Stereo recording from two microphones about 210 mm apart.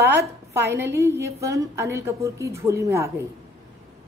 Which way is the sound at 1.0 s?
15° right (ahead or behind).